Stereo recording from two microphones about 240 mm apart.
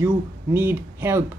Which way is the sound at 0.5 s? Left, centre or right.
Centre.